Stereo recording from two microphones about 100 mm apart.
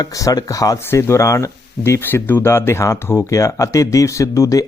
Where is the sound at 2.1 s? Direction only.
20° left (ahead or behind).